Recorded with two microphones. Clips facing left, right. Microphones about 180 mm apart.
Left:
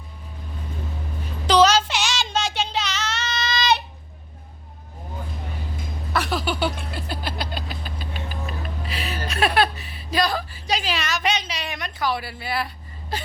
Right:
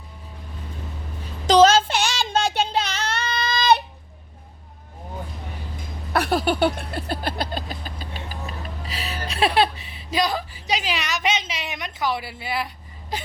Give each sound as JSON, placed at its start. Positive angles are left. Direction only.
{"t": 1.5, "sound": "child singing", "side_deg": -45}
{"t": 6.1, "sound": "vehicle", "side_deg": -55}
{"t": 9.2, "sound": "a sound", "side_deg": -25}